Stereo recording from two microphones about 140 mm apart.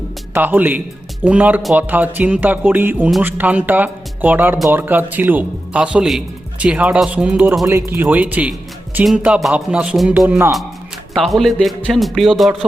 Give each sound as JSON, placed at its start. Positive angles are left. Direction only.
{"t": 0.3, "sound": "speech", "side_deg": -15}
{"t": 7.7, "sound": "speech", "side_deg": -15}
{"t": 11.1, "sound": "a man's voice", "side_deg": 0}